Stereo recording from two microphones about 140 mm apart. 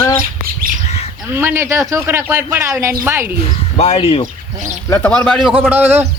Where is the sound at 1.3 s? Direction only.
15° right (ahead or behind).